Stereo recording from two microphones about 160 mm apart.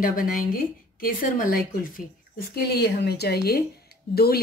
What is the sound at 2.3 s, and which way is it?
A woman's voice, 85° left.